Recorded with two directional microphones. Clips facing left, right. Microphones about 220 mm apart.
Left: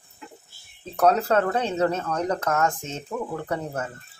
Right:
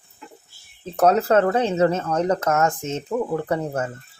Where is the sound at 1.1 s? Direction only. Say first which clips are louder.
Right 3 dB; 20° right (ahead or behind).